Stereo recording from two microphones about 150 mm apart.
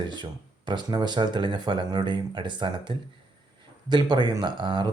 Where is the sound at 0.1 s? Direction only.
30° right (ahead or behind).